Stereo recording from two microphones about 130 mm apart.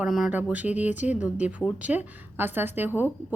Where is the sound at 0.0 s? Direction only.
Centre (ahead or behind).